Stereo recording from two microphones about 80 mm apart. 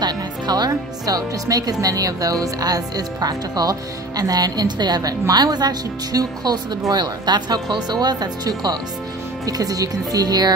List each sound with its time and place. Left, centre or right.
0.0 s speech: right